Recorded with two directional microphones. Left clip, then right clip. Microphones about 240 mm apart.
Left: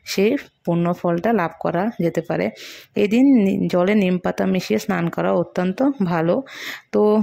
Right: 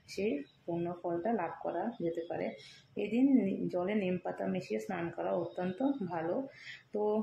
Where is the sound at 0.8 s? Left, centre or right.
Left.